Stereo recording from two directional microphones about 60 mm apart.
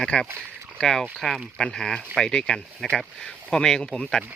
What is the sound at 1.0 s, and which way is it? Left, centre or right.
Speech, centre.